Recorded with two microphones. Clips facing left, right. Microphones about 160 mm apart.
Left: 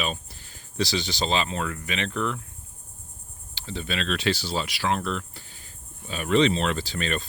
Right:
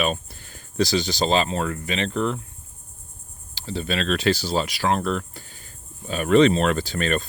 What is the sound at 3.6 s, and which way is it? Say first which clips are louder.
Speech: right 5 dB; 35° right (ahead or behind).